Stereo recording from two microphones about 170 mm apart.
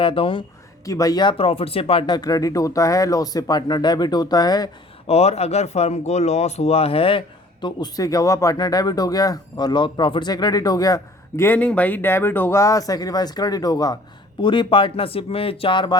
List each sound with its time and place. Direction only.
0.0 s speech: 30° left (ahead or behind)
0.9 s speech: 20° left (ahead or behind)
5.0 s speech: 40° left (ahead or behind)